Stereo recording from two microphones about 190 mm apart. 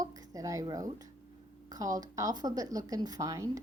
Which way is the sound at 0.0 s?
20° right (ahead or behind).